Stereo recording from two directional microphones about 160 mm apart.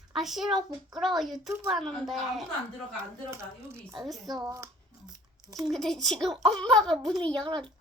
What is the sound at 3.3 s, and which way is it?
Speech, 15° right (ahead or behind).